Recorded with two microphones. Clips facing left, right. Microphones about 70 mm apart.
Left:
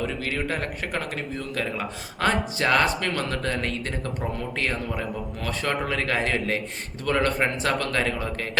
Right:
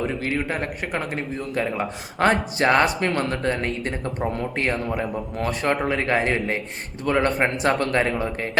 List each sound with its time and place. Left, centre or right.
0.1 s speech: right